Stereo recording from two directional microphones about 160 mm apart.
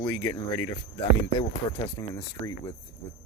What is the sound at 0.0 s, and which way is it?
Speech, 15° left (ahead or behind).